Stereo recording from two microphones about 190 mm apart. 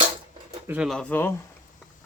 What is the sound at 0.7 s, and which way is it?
Speech, 5° right (ahead or behind).